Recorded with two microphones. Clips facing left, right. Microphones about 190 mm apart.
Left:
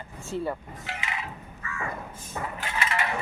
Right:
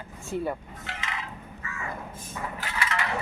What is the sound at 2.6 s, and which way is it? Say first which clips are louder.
Crushing: left 1 dB; 20° left (ahead or behind).